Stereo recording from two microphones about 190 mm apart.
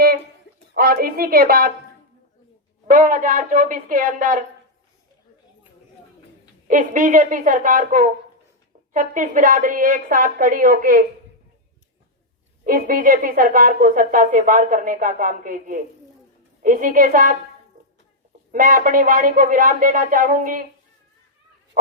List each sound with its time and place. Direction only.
0.7 s a woman's voice: 55° right (ahead or behind)
2.8 s a woman's voice: 45° right (ahead or behind)
6.7 s a woman's voice: 45° right (ahead or behind)
12.6 s a woman's voice: 45° right (ahead or behind)
18.5 s a woman's voice: 45° right (ahead or behind)